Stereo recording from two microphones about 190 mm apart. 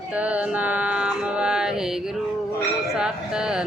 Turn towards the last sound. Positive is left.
turn(degrees=-5)  # may be behind; listen again after turning